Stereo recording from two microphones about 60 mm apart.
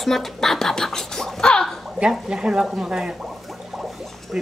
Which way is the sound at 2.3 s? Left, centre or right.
Centre.